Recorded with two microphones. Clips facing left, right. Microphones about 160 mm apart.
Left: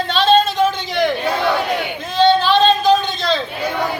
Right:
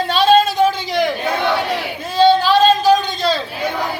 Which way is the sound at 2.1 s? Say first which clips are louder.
Right 1 dB; 10° right (ahead or behind).